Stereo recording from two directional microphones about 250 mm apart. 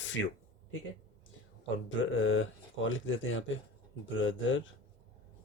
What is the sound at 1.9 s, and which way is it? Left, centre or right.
Speech, left.